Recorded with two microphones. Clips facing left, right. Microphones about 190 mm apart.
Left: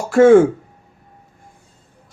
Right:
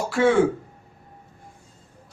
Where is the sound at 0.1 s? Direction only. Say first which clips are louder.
Left 10 dB; 45° left (ahead or behind).